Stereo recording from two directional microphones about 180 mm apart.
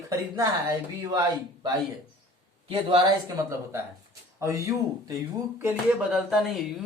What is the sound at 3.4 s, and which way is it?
Speech, 20° right (ahead or behind).